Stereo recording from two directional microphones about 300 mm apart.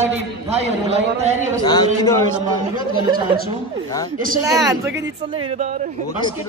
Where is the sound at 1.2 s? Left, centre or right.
Right.